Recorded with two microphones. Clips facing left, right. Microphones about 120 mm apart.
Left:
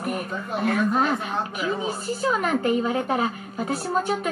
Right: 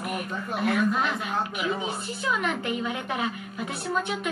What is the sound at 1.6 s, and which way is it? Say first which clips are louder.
A woman's voice: left 3 dB; 40° left (ahead or behind).